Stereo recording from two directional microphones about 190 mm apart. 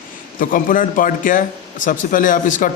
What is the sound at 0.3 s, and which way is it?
A man's voice, 45° left (ahead or behind).